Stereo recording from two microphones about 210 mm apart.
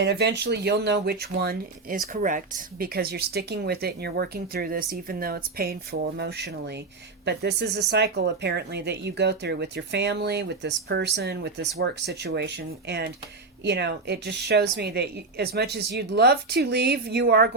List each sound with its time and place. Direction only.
0.0 s speech: 55° right (ahead or behind)